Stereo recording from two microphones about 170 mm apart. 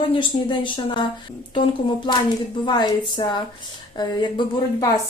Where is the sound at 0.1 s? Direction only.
30° left (ahead or behind).